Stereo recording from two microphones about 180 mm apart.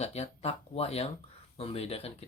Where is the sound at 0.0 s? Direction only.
35° left (ahead or behind).